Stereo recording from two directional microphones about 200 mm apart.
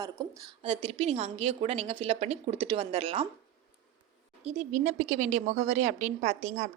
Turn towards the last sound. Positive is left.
turn(degrees=-35)  # may be behind; listen again after turning